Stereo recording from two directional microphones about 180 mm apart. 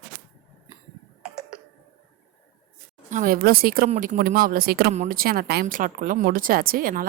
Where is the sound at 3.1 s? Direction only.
50° right (ahead or behind).